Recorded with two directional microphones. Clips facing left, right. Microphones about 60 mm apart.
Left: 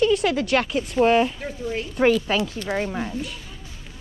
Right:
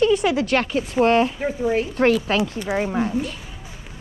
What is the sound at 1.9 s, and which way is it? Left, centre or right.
Speech, centre.